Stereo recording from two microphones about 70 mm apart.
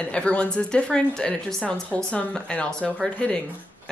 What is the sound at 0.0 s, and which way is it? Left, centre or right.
Speech, centre.